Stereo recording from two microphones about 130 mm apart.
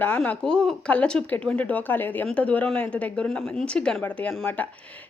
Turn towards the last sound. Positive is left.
turn(degrees=10)  # may be behind; listen again after turning